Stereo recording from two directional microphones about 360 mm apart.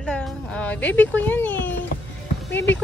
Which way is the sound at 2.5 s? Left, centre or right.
Left.